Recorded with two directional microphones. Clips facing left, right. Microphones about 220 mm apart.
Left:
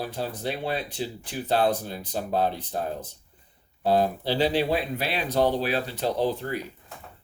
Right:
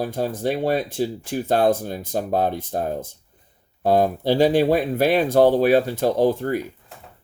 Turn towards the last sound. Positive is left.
turn(degrees=-50)  # may be behind; listen again after turning